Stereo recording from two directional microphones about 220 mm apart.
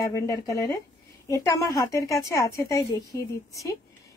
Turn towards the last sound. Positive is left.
turn(degrees=15)  # may be behind; listen again after turning